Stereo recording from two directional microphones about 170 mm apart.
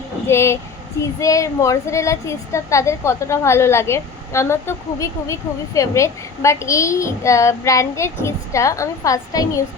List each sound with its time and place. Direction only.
0.3 s a woman's voice: 15° left (ahead or behind)